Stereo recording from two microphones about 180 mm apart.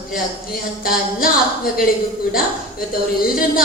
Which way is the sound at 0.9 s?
55° left (ahead or behind).